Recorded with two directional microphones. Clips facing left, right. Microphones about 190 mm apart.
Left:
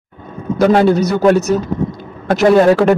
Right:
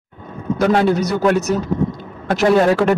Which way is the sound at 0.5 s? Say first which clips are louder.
Left 4 dB; 30° left (ahead or behind).